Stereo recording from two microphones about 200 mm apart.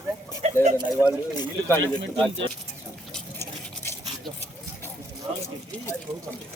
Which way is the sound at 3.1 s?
10° left (ahead or behind).